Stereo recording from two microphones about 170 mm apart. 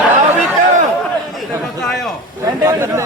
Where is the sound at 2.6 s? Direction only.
15° right (ahead or behind).